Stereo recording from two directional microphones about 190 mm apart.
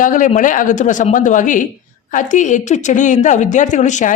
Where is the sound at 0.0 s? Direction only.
45° left (ahead or behind).